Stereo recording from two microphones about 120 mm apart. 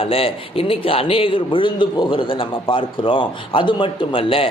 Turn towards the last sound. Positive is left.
turn(degrees=50)  # may be behind; listen again after turning